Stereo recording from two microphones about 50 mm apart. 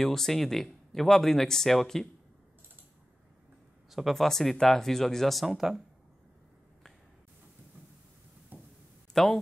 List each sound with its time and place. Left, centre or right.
0.0 s speech: centre
3.9 s speech: centre
8.5 s a sound: right
9.1 s speech: centre